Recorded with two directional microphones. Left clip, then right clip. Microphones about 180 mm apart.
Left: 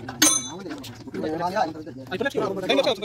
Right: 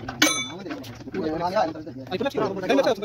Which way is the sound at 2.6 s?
50° right (ahead or behind).